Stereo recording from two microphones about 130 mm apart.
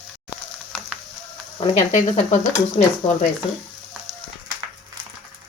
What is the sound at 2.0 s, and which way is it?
Speech, 65° left (ahead or behind).